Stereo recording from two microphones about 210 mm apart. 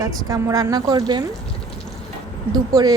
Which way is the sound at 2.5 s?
20° right (ahead or behind).